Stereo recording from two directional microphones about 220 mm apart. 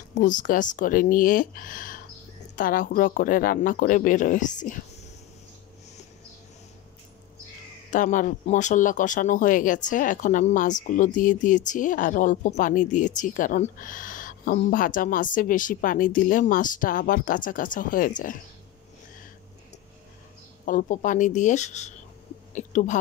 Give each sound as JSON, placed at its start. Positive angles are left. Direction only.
{"t": 0.1, "sound": "speech", "side_deg": 35}
{"t": 7.9, "sound": "speech", "side_deg": 35}
{"t": 20.6, "sound": "speech", "side_deg": 35}